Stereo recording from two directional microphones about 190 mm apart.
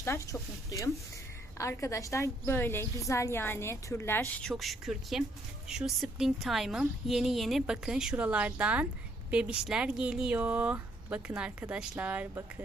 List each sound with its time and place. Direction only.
0.0 s a woman's voice: 15° left (ahead or behind)
4.4 s a woman's voice: centre (ahead or behind)